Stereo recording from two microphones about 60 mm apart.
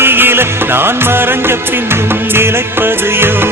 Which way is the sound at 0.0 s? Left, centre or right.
Right.